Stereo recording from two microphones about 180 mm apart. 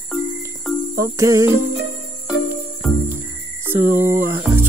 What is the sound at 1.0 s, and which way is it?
Speech, 15° right (ahead or behind).